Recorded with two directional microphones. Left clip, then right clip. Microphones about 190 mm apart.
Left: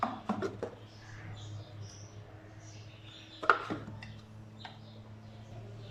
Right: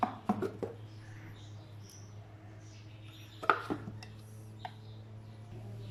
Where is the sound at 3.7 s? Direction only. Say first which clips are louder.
Right 1 dB; 5° right (ahead or behind).